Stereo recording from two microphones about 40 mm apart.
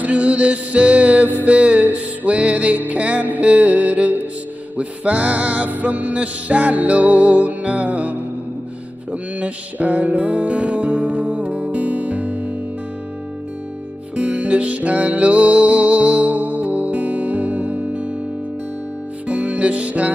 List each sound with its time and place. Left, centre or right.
0.0 s music: right
9.4 s music: right
14.1 s music: right
19.2 s music: right